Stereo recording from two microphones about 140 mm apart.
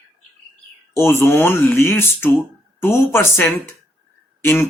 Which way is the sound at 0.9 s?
15° left (ahead or behind).